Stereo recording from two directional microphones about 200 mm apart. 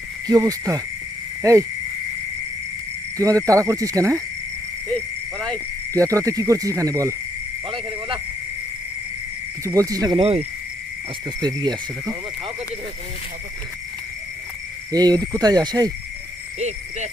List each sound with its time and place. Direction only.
0.3 s speech: 20° right (ahead or behind)
3.2 s speech: 15° right (ahead or behind)
4.9 s speech: 5° left (ahead or behind)
5.9 s speech: 15° right (ahead or behind)
7.7 s a sound: 25° right (ahead or behind)
9.6 s speech: 15° right (ahead or behind)
14.9 s speech: 20° right (ahead or behind)
16.6 s speech: 35° right (ahead or behind)